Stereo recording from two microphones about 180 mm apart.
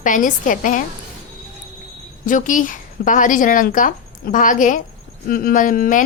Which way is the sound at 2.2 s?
45° left (ahead or behind).